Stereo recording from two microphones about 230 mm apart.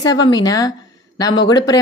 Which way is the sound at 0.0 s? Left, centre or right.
Centre.